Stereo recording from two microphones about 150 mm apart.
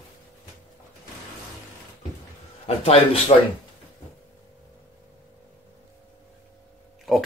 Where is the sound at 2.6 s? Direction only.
40° left (ahead or behind).